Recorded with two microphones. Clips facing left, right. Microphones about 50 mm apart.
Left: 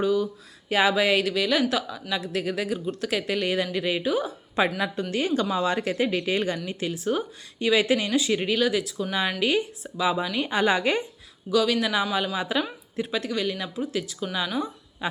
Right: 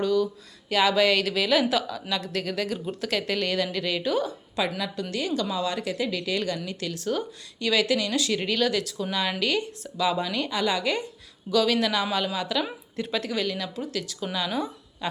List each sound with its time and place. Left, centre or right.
0.0 s a sound: centre
0.7 s speech: centre
1.2 s speech: centre
2.8 s speech: centre
3.1 s speech: centre
4.6 s a woman's voice: left; by 10.5 s centre
10.5 s a woman's voice: left
11.5 s a woman's voice: centre
13.0 s speech: centre
15.0 s a sound: centre